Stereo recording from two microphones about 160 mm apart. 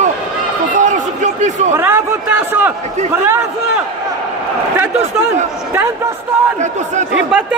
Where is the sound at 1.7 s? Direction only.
15° right (ahead or behind).